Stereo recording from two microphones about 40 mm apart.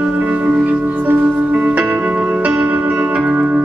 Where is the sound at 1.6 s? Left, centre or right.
Right.